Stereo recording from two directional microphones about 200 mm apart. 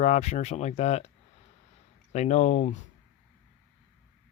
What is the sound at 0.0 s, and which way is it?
Speech, 35° left (ahead or behind).